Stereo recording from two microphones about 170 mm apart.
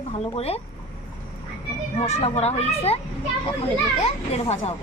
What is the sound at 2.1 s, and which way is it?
Speech, 35° left (ahead or behind).